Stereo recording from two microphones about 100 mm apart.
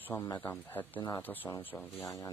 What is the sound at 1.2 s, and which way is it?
Speech, 20° left (ahead or behind).